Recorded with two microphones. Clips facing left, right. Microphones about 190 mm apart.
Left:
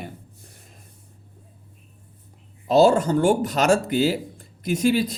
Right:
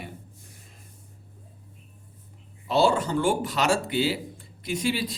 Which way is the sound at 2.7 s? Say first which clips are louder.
Left 6 dB; 40° left (ahead or behind).